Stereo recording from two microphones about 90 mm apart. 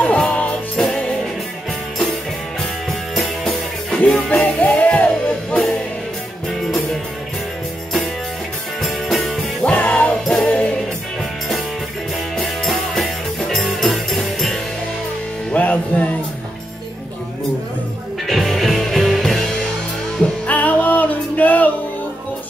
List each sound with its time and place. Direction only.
0.0 s music: 10° left (ahead or behind)
2.9 s music: centre (ahead or behind)
4.3 s music: 15° left (ahead or behind)
8.8 s music: centre (ahead or behind)
9.7 s music: 15° left (ahead or behind)
12.4 s music: centre (ahead or behind)
15.5 s music: 15° left (ahead or behind)
18.2 s music: centre (ahead or behind)
20.4 s music: 20° left (ahead or behind)